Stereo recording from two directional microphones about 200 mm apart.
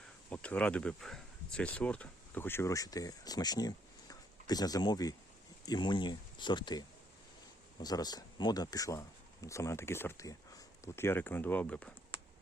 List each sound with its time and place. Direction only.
0.3 s speech: 5° left (ahead or behind)